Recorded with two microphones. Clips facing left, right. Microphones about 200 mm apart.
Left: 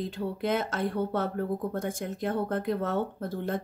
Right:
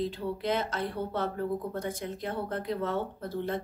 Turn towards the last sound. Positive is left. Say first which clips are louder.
# left 1 dB
turn(degrees=50)  # may be behind; listen again after turning